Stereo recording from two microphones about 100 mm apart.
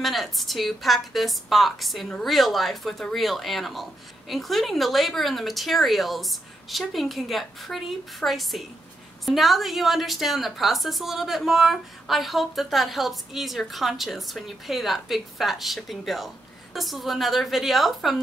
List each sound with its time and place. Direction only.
0.0 s a woman's voice: centre (ahead or behind)